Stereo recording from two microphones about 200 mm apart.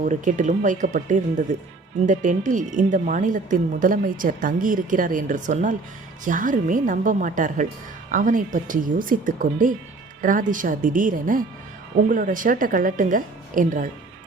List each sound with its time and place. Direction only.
0.0 s speech: 40° right (ahead or behind)